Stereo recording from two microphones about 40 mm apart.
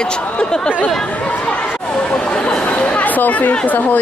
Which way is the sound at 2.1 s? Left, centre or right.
Centre.